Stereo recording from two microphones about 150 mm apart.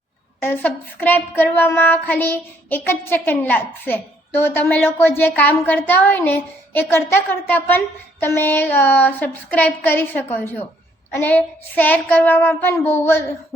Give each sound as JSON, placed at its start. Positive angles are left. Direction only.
{"t": 0.3, "sound": "speech", "side_deg": 15}